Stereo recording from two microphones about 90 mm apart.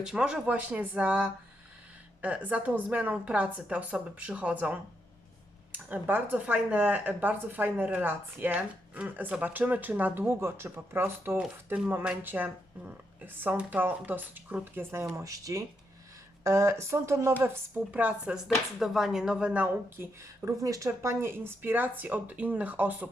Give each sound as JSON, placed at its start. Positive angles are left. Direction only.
{"t": 0.0, "sound": "a woman's voice", "side_deg": -5}
{"t": 11.3, "sound": "a woman's voice", "side_deg": -15}
{"t": 18.3, "sound": "a woman's voice", "side_deg": -5}
{"t": 20.4, "sound": "speech", "side_deg": -35}